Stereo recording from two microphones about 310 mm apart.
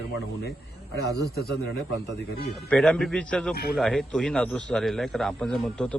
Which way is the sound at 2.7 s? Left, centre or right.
Centre.